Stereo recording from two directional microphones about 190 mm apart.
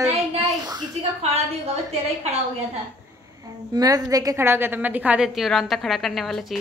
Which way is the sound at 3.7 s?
20° right (ahead or behind).